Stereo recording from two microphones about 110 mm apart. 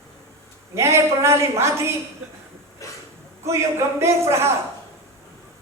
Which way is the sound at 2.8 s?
30° left (ahead or behind).